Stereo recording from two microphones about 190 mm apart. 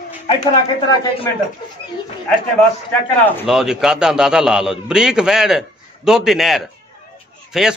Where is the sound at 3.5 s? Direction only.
Centre (ahead or behind).